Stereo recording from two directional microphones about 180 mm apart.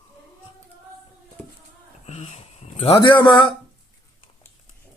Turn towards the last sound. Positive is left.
turn(degrees=25)  # may be behind; listen again after turning